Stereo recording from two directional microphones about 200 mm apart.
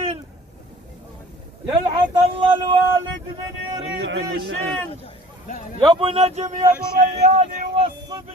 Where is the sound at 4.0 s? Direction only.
60° right (ahead or behind).